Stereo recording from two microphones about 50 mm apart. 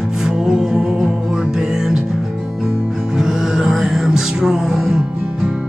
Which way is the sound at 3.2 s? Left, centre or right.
Centre.